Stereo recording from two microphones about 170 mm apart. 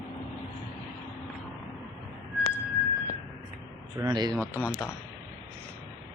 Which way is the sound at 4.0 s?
20° right (ahead or behind).